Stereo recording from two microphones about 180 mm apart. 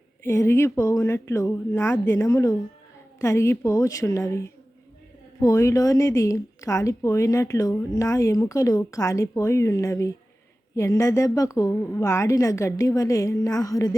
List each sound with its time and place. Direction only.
0.3 s a woman's voice: 15° left (ahead or behind)